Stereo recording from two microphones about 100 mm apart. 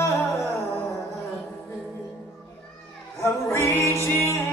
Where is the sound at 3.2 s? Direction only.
30° left (ahead or behind).